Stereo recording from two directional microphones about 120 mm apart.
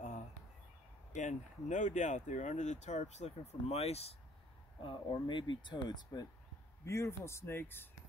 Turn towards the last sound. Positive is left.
turn(degrees=20)  # may be behind; listen again after turning